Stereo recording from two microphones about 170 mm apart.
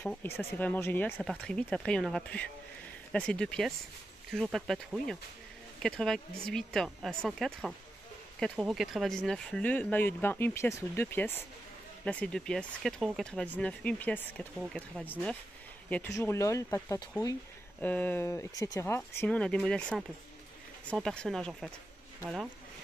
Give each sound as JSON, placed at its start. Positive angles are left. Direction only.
{"t": 0.0, "sound": "speech", "side_deg": 10}
{"t": 16.2, "sound": "speech", "side_deg": 15}